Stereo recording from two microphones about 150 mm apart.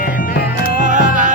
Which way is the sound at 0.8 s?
60° right (ahead or behind).